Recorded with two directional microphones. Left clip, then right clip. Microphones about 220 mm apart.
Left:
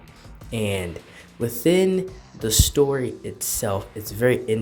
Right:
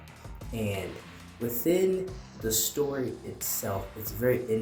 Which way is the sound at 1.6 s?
45° left (ahead or behind).